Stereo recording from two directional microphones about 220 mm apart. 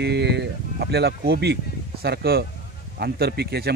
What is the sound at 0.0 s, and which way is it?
Speech, 50° right (ahead or behind).